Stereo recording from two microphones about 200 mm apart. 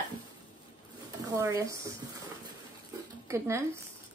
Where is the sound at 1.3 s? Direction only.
15° right (ahead or behind).